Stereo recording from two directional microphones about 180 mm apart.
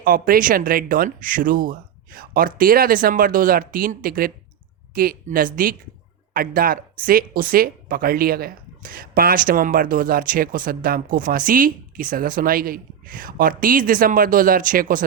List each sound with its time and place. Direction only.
0.0 s speech: 50° right (ahead or behind)